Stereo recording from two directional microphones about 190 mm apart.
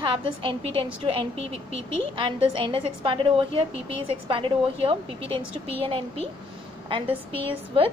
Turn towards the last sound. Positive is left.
turn(degrees=-30)  # may be behind; listen again after turning